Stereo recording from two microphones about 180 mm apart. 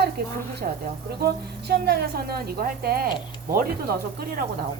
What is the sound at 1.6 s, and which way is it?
Speech, 65° right (ahead or behind).